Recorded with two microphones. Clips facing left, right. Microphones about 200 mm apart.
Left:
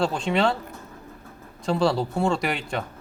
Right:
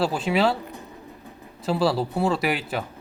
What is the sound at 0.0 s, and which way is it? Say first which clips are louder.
Speech: right 1 dB; 5° right (ahead or behind).